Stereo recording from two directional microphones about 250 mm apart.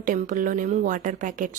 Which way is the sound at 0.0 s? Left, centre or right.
Right.